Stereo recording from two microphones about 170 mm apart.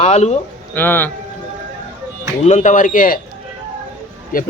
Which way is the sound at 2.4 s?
45° left (ahead or behind).